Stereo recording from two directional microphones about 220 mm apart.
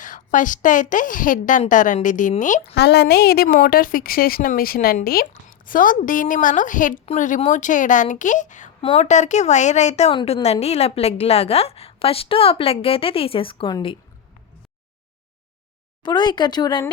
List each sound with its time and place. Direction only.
0.0 s a woman's voice: 35° left (ahead or behind)
2.7 s a woman's voice: 50° left (ahead or behind); by 13.9 s 20° left (ahead or behind)
16.0 s a woman's voice: 20° left (ahead or behind)